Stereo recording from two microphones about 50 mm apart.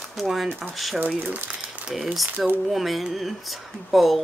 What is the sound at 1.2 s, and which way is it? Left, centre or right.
Speech, right.